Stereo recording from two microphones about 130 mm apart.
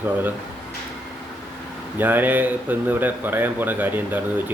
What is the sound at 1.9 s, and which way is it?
Speech, 15° right (ahead or behind).